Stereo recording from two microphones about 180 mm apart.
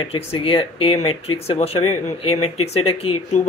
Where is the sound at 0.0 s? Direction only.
30° left (ahead or behind).